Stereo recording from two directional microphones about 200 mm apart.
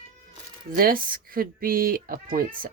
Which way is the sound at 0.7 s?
45° right (ahead or behind).